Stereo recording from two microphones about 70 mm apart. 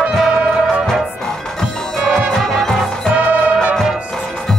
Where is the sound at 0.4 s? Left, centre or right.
Centre.